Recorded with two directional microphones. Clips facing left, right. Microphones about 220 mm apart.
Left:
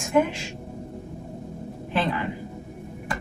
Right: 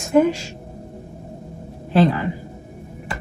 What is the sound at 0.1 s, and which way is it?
Speech, 35° right (ahead or behind).